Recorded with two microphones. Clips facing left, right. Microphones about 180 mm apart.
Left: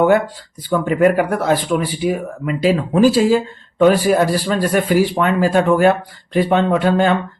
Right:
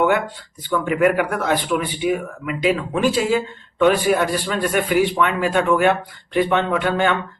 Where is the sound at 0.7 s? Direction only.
30° left (ahead or behind).